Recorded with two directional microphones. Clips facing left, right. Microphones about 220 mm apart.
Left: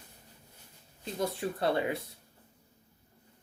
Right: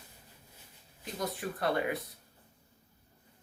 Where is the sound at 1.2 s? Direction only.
25° left (ahead or behind).